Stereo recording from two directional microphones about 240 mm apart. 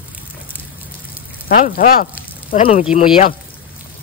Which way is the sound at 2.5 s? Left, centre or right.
Left.